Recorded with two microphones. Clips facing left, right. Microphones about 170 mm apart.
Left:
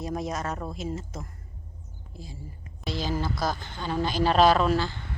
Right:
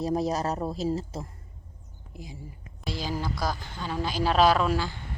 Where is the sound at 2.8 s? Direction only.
10° right (ahead or behind).